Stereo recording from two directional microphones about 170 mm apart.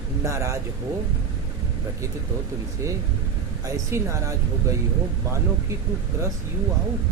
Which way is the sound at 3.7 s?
20° right (ahead or behind).